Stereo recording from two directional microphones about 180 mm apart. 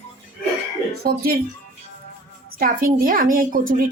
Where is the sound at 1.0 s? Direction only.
55° right (ahead or behind).